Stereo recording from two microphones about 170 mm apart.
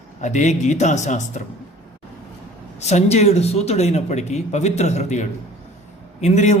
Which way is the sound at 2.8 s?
40° left (ahead or behind).